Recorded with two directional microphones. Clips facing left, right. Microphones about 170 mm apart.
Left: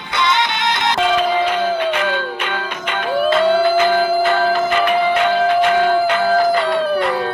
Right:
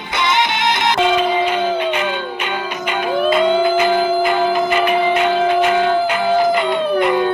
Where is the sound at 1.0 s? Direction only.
5° right (ahead or behind).